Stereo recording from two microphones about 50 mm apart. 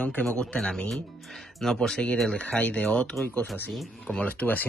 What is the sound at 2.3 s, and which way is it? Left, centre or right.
Speech, left.